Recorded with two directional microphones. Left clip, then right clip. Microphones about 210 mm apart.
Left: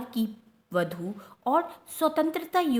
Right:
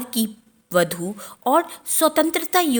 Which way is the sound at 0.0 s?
35° right (ahead or behind).